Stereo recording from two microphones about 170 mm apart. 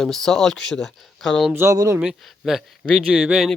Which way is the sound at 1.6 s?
20° right (ahead or behind).